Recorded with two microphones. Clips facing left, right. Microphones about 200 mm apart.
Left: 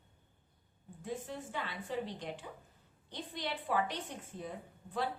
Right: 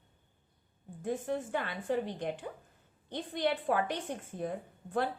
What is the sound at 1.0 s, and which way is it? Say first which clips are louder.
A woman's voice: right 7 dB; 55° right (ahead or behind).